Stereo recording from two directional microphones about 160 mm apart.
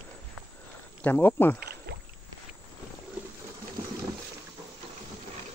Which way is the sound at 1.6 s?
90° right.